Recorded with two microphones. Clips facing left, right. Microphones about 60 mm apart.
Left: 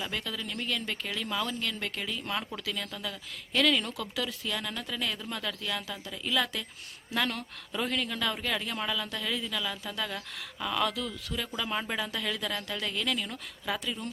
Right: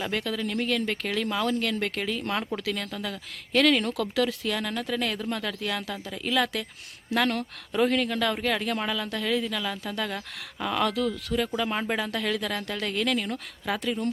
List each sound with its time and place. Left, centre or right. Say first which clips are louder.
0.0 s speech: right 6 dB; right
10.8 s speech: right 6 dB; right
11.9 s speech: right 5 dB; right